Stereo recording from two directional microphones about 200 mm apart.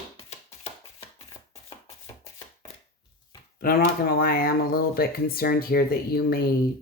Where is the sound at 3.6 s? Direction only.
50° left (ahead or behind).